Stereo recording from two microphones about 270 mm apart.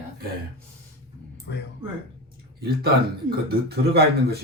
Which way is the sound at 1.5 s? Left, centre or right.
Left.